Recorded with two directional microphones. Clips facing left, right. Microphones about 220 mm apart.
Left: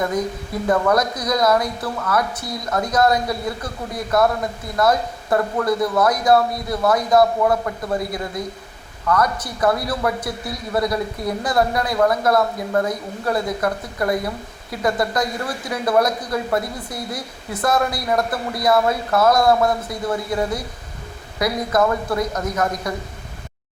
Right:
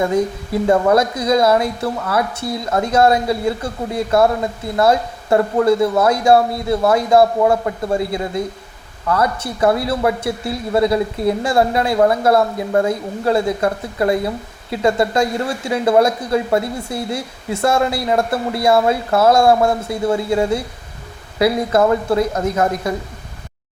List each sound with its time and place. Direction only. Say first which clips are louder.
0.0 s speech: right 5 dB; 25° right (ahead or behind)